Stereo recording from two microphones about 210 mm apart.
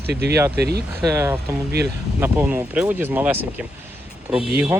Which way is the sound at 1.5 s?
15° right (ahead or behind).